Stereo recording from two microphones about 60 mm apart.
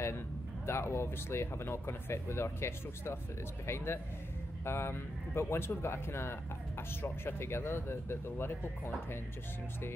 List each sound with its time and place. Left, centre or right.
0.7 s speech: left